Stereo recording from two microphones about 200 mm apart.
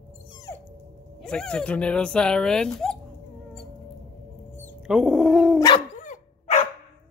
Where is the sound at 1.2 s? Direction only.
5° left (ahead or behind).